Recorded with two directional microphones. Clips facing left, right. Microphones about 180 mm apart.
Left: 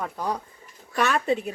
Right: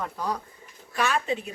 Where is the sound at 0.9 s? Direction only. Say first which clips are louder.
Left 3 dB; 50° left (ahead or behind).